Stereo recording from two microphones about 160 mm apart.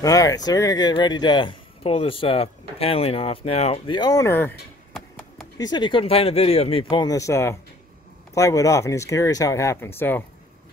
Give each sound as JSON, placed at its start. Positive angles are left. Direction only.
{"t": 0.0, "sound": "speech", "side_deg": 20}
{"t": 5.6, "sound": "speech", "side_deg": 30}